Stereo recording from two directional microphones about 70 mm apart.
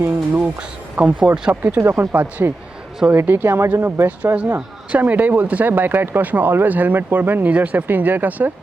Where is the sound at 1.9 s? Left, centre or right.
Right.